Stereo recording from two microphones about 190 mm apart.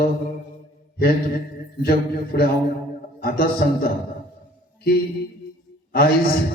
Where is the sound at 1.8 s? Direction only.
50° left (ahead or behind).